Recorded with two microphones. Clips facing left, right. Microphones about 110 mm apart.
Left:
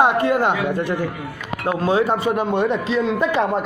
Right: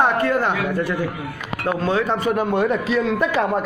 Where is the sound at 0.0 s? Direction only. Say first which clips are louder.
Left 2 dB; 15° left (ahead or behind).